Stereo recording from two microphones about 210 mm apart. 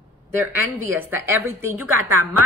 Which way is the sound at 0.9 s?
10° right (ahead or behind).